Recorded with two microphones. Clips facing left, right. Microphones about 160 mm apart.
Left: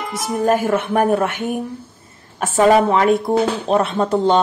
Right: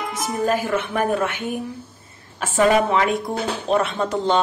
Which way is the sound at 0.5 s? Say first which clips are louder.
Left 7 dB; 45° left (ahead or behind).